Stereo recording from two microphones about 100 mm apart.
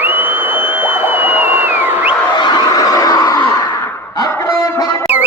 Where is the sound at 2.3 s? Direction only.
45° left (ahead or behind).